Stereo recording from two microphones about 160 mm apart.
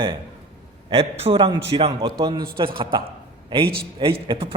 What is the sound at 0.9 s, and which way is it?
A man's voice, 35° right (ahead or behind).